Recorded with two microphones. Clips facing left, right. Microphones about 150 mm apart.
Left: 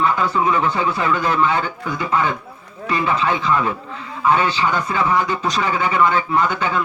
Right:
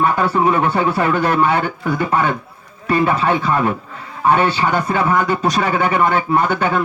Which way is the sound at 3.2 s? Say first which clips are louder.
Right 3 dB; 55° right (ahead or behind).